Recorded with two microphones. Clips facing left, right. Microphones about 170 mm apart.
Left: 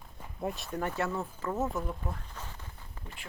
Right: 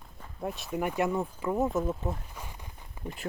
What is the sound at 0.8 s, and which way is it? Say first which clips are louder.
Speech: right 4 dB; 15° right (ahead or behind).